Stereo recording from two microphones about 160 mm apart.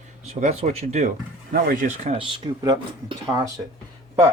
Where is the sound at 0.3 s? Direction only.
45° right (ahead or behind).